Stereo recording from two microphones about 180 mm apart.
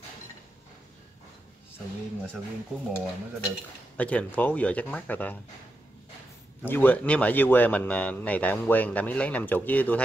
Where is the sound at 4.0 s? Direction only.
5° left (ahead or behind).